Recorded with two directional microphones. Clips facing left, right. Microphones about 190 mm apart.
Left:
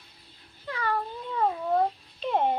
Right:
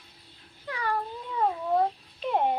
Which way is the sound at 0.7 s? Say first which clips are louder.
Left 1 dB; 15° right (ahead or behind).